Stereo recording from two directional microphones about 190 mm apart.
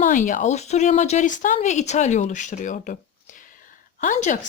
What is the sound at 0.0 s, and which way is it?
Speech, 40° left (ahead or behind).